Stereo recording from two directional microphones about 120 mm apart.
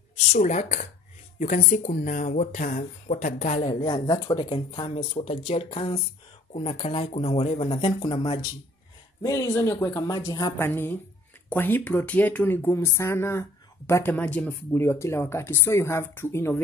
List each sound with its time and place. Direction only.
0.3 s speech: 75° left (ahead or behind); by 3.7 s 60° left (ahead or behind)
3.8 s speech: 35° left (ahead or behind)
9.2 s speech: 30° left (ahead or behind)
10.6 s speech: 20° left (ahead or behind)
14.1 s speech: 10° left (ahead or behind)